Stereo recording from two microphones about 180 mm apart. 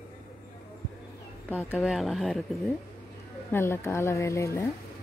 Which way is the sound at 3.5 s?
15° left (ahead or behind).